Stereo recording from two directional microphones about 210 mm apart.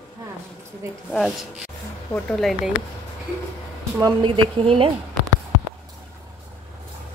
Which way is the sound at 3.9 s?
20° right (ahead or behind).